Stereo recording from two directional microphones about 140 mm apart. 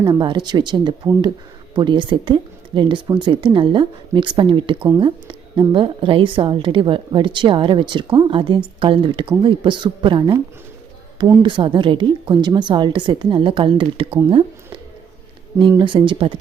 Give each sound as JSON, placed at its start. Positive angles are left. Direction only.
{"t": 0.0, "sound": "a woman's voice", "side_deg": -35}
{"t": 11.4, "sound": "a woman's voice", "side_deg": -35}
{"t": 15.8, "sound": "a woman's voice", "side_deg": -35}